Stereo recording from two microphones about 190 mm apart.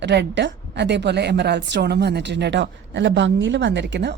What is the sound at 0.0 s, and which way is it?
A woman's voice, 65° right (ahead or behind).